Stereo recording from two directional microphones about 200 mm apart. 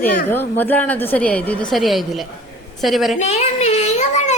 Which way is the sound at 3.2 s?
35° left (ahead or behind).